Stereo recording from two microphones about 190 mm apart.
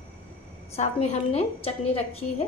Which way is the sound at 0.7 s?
35° left (ahead or behind).